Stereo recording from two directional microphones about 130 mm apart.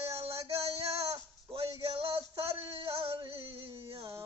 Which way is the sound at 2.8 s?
45° right (ahead or behind).